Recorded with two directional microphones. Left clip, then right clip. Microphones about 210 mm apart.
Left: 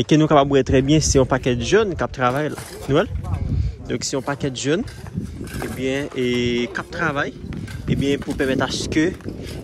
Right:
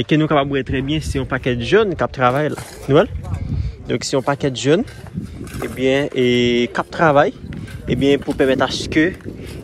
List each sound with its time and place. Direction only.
0.0 s speech: 15° left (ahead or behind); by 1.2 s 30° left (ahead or behind)
1.3 s speech: 15° left (ahead or behind)